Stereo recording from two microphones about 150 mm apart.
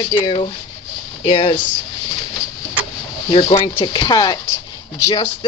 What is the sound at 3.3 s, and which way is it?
Speech, 35° left (ahead or behind).